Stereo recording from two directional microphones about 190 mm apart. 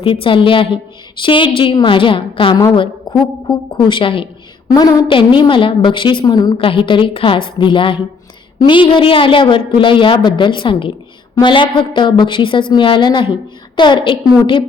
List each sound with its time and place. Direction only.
0.0 s a woman's voice: 25° left (ahead or behind)